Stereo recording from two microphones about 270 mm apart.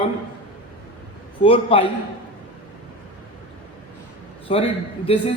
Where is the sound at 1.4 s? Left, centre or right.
Centre.